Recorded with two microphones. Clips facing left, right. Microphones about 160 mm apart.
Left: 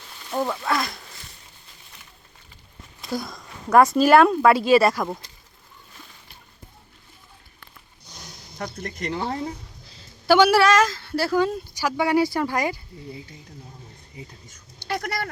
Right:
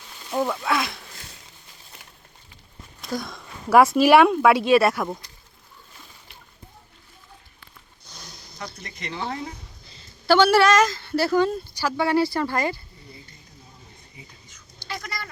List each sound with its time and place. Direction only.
0.4 s a woman's voice: centre (ahead or behind)
3.0 s a sound: centre (ahead or behind)
3.9 s a woman's voice: 5° right (ahead or behind)
8.0 s a sound: 15° left (ahead or behind)
8.5 s speech: 50° left (ahead or behind)
9.2 s speech: 35° left (ahead or behind)
9.8 s a sound: centre (ahead or behind)
10.2 s a woman's voice: 10° left (ahead or behind)
14.4 s speech: 50° left (ahead or behind)